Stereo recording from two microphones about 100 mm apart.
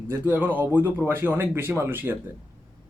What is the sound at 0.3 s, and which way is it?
Speech, 15° right (ahead or behind).